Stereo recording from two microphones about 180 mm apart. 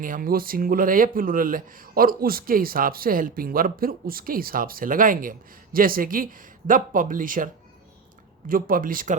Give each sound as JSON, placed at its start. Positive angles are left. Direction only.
{"t": 0.0, "sound": "speech", "side_deg": -50}